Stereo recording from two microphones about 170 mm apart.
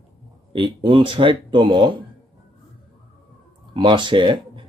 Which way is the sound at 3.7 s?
30° right (ahead or behind).